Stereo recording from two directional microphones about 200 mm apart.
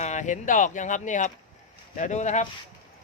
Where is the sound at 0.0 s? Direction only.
35° left (ahead or behind).